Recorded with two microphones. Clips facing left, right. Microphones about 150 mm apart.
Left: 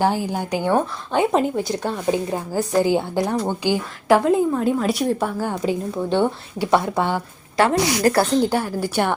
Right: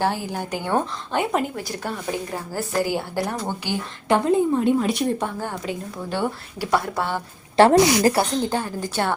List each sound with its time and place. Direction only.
0.0 s speech: 15° left (ahead or behind)
4.1 s a woman's voice: centre (ahead or behind)
5.6 s speech: 25° left (ahead or behind)
7.5 s a woman's voice: 30° right (ahead or behind)
8.1 s speech: 5° left (ahead or behind)